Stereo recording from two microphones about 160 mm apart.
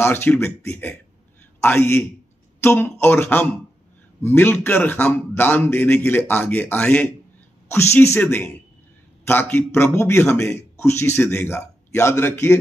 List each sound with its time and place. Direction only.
0.0 s a man's voice: 15° left (ahead or behind)